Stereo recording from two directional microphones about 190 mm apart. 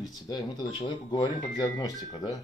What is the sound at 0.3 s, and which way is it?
Speech, 25° left (ahead or behind).